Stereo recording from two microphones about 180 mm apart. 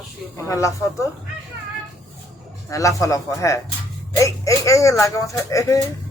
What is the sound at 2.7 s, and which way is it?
Speech, 15° left (ahead or behind).